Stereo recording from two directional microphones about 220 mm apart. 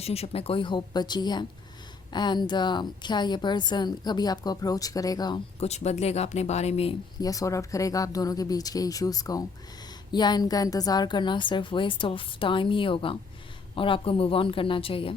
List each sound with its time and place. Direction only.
0.0 s a woman's voice: 30° left (ahead or behind)
5.5 s a woman's voice: 30° left (ahead or behind)
7.2 s a woman's voice: 15° left (ahead or behind)